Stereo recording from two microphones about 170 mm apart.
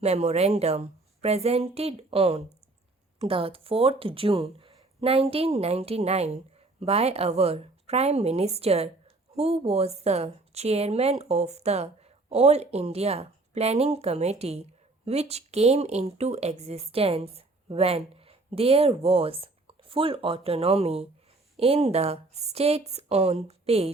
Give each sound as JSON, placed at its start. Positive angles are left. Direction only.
{"t": 0.0, "sound": "a woman's voice", "side_deg": -40}